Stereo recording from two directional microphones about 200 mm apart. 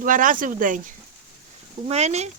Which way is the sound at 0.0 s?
40° right (ahead or behind).